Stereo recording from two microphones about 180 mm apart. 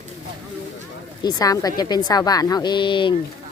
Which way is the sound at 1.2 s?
20° left (ahead or behind).